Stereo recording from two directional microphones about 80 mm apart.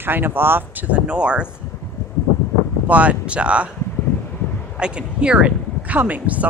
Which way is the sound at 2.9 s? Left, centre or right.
Centre.